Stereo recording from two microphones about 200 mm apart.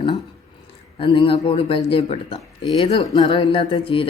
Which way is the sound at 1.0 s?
25° left (ahead or behind).